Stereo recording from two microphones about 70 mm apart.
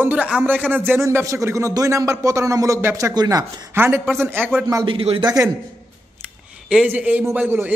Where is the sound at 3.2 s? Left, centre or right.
Right.